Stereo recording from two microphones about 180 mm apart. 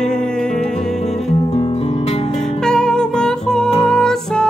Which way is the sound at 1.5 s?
35° left (ahead or behind).